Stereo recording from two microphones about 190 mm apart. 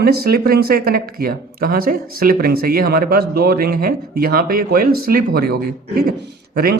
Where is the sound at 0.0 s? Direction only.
55° right (ahead or behind).